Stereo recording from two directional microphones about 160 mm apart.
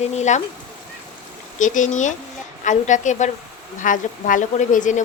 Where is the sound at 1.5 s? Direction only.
50° left (ahead or behind).